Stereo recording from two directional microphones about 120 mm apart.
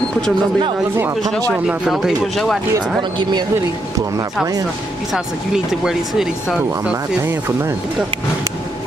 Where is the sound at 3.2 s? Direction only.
35° right (ahead or behind).